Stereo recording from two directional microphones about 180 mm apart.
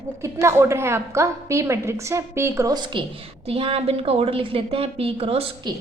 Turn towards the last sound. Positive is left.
turn(degrees=-30)  # may be behind; listen again after turning